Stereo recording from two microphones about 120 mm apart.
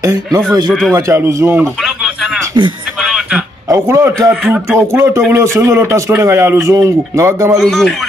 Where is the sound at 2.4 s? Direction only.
40° right (ahead or behind).